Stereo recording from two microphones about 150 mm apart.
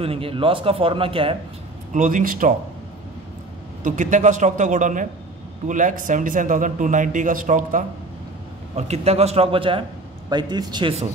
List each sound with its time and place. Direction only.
0.0 s speech: 40° right (ahead or behind)
2.0 s a man's voice: 60° right (ahead or behind)
3.8 s a man's voice: 60° right (ahead or behind)
8.7 s a man's voice: 45° right (ahead or behind); by 10.9 s 30° right (ahead or behind)